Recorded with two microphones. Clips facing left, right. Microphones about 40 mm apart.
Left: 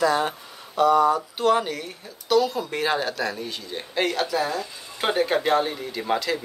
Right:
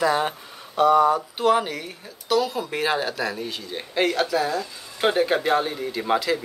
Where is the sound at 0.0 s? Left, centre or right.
Centre.